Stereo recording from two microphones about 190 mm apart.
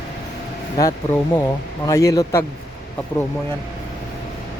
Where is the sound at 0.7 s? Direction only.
20° left (ahead or behind).